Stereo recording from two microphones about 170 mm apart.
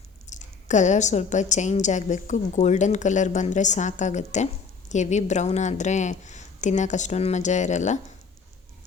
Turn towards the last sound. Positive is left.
turn(degrees=45)  # may be behind; listen again after turning